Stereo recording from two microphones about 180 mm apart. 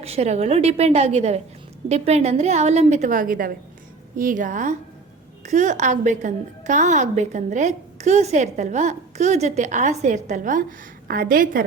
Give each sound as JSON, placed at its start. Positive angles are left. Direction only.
{"t": 0.0, "sound": "a woman's voice", "side_deg": -35}